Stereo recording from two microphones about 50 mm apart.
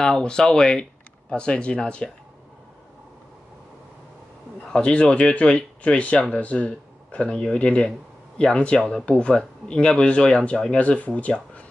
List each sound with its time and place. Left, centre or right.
0.0 s speech: centre
4.7 s speech: left